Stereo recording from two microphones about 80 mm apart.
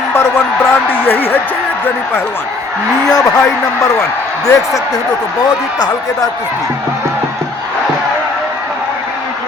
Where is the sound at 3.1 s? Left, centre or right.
Left.